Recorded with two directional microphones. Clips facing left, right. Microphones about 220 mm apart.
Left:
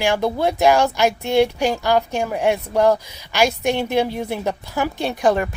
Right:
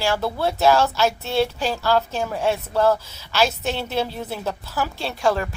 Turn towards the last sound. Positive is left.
turn(degrees=15)  # may be behind; listen again after turning